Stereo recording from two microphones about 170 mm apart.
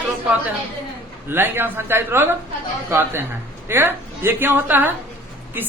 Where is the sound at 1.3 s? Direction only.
10° right (ahead or behind).